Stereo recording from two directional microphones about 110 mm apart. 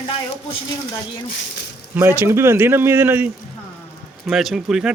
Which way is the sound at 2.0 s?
20° right (ahead or behind).